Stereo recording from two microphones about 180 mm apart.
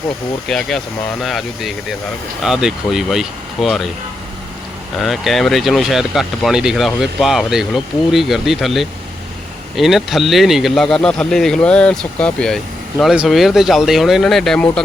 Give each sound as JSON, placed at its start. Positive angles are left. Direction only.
{"t": 0.4, "sound": "speech", "side_deg": 0}
{"t": 4.9, "sound": "speech", "side_deg": 0}